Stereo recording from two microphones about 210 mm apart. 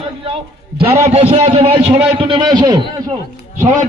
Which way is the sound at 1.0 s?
25° right (ahead or behind).